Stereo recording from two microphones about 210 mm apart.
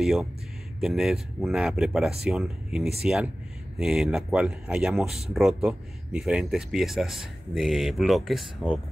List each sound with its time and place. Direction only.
0.0 s speech: centre (ahead or behind)